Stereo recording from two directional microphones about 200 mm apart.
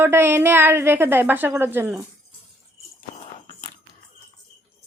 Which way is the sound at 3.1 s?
35° left (ahead or behind).